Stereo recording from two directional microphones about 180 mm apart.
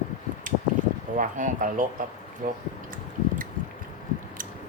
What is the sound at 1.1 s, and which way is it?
Speech, 45° right (ahead or behind).